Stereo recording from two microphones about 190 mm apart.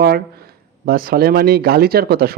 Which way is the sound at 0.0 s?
55° right (ahead or behind).